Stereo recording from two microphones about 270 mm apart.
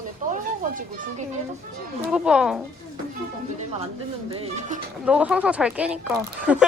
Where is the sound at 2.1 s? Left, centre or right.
Centre.